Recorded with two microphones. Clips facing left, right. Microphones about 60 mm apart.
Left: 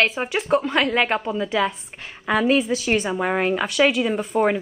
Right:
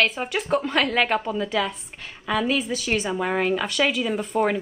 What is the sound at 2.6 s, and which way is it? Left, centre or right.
A woman's voice, centre.